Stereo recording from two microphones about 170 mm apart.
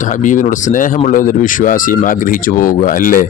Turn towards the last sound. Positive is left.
turn(degrees=55)  # may be behind; listen again after turning